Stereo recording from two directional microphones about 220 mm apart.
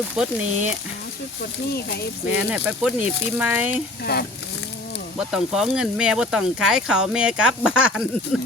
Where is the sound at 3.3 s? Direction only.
10° right (ahead or behind).